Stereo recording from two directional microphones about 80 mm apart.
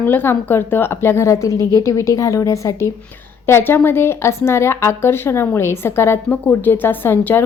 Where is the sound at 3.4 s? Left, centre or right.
Left.